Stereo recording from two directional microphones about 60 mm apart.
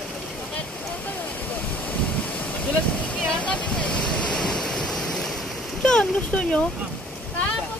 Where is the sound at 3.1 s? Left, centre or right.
Left.